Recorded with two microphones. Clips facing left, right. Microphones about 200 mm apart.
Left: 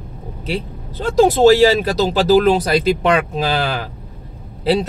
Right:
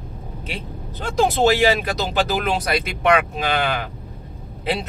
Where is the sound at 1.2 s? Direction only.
35° left (ahead or behind).